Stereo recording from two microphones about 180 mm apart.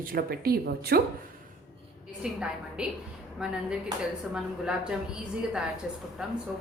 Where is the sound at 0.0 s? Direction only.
55° right (ahead or behind).